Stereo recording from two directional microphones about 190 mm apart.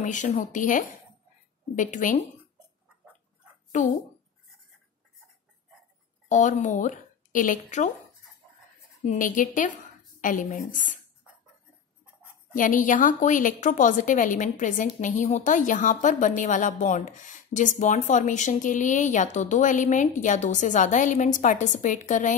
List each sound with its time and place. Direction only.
0.0 s a woman's voice: 40° left (ahead or behind)
3.7 s a woman's voice: 40° left (ahead or behind)
6.2 s a woman's voice: 40° left (ahead or behind)
9.0 s a woman's voice: 45° left (ahead or behind)
12.5 s a woman's voice: 45° left (ahead or behind)